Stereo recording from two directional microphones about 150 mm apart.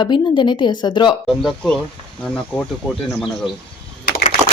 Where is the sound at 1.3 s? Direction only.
Centre (ahead or behind).